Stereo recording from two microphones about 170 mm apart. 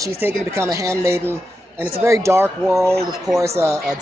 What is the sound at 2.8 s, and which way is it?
Speech, centre (ahead or behind).